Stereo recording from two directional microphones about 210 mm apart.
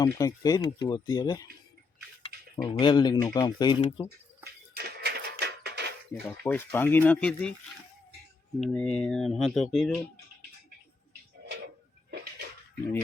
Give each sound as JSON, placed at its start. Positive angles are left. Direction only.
{"t": 0.0, "sound": "speech", "side_deg": 15}
{"t": 2.6, "sound": "speech", "side_deg": 20}
{"t": 4.7, "sound": "a sound", "side_deg": -50}
{"t": 6.4, "sound": "speech", "side_deg": 10}
{"t": 8.6, "sound": "speech", "side_deg": 5}